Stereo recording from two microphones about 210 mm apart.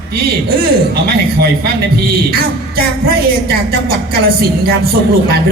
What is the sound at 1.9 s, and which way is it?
Speech, 45° right (ahead or behind).